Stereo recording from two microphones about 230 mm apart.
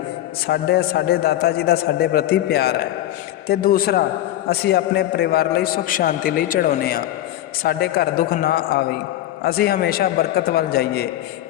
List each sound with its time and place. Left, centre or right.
0.4 s a man's voice: left